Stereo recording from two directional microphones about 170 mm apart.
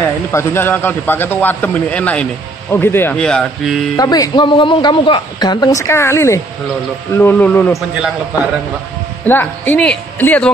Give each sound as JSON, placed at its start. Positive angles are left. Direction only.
{"t": 0.0, "sound": "a man's voice", "side_deg": 15}
{"t": 3.9, "sound": "a man's voice", "side_deg": 20}
{"t": 9.2, "sound": "a man's voice", "side_deg": 10}